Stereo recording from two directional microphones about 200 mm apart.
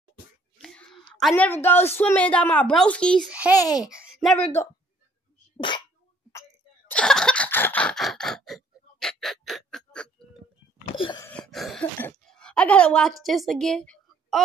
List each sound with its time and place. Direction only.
0.6 s a sound: centre (ahead or behind)
1.2 s speech: 5° left (ahead or behind)
3.3 s a child's voice: 5° right (ahead or behind)
3.5 s speech: 20° left (ahead or behind)
3.8 s a child's voice: 5° right (ahead or behind)
6.9 s a sound: 5° left (ahead or behind)
11.0 s wail: 25° left (ahead or behind)
11.2 s speech: 5° left (ahead or behind)